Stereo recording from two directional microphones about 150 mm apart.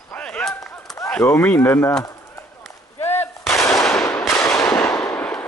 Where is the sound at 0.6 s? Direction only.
15° left (ahead or behind).